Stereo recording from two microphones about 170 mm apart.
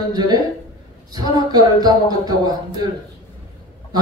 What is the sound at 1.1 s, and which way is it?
Speech, 25° right (ahead or behind).